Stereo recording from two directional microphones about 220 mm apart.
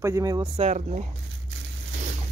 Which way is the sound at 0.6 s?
30° right (ahead or behind).